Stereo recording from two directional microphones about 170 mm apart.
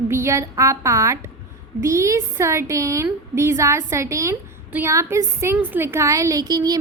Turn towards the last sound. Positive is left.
turn(degrees=-25)  # may be behind; listen again after turning